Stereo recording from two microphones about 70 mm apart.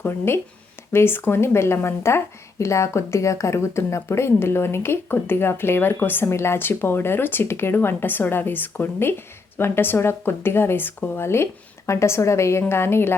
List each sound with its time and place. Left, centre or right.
0.0 s speech: left